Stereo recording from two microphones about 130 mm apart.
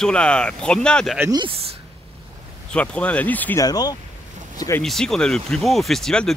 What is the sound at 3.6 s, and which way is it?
Speech, 30° left (ahead or behind).